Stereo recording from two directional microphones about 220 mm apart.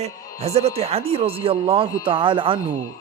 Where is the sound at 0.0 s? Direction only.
30° right (ahead or behind).